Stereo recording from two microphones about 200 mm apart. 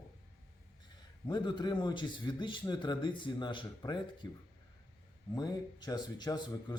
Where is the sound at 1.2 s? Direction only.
20° left (ahead or behind).